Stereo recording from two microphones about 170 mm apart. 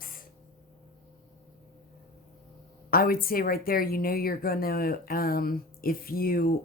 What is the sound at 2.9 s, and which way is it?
A woman's voice, 60° left (ahead or behind).